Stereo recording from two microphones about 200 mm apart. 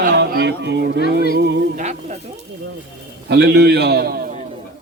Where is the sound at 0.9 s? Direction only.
50° left (ahead or behind).